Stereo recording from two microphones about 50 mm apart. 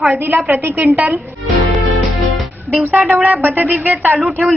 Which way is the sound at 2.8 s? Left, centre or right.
Right.